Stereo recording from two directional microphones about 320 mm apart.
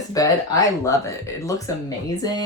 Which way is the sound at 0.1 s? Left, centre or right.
Centre.